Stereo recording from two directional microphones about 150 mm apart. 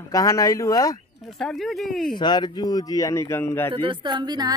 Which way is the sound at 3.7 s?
35° right (ahead or behind).